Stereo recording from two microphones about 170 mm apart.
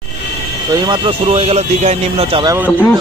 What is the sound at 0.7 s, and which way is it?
Speech, 25° right (ahead or behind).